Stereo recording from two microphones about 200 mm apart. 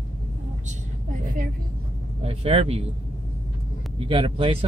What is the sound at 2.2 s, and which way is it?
Speech, 30° right (ahead or behind).